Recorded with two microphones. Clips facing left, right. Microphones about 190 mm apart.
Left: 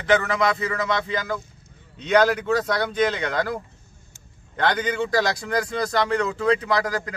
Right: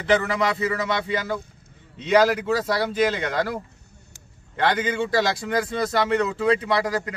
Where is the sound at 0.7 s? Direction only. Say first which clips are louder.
Right 1 dB; 10° right (ahead or behind).